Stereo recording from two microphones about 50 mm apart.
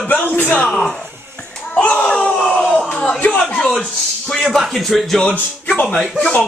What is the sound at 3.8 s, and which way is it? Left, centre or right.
Speech, centre.